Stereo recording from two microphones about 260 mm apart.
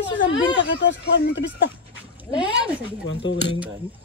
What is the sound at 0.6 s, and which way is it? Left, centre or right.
Speech, left.